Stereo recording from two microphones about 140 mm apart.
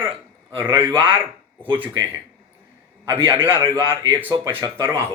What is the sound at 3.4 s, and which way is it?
A man's voice, 15° right (ahead or behind).